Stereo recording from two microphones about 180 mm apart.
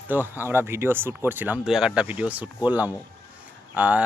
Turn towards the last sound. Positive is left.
turn(degrees=-10)  # may be behind; listen again after turning